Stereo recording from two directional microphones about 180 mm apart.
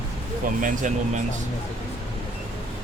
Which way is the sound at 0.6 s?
45° right (ahead or behind).